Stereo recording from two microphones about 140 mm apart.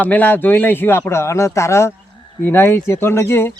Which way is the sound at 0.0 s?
10° left (ahead or behind).